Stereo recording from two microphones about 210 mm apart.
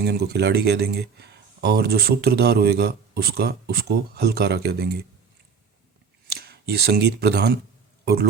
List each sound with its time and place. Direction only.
0.0 s speech: 50° right (ahead or behind)
6.4 s a man's voice: 50° right (ahead or behind)